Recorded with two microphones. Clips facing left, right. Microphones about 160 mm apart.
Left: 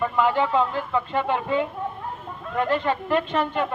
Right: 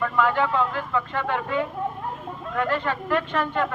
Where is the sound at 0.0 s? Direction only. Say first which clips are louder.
Left 1 dB; 20° left (ahead or behind).